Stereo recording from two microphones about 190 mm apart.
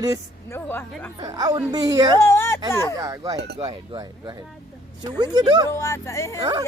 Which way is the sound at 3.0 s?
20° right (ahead or behind).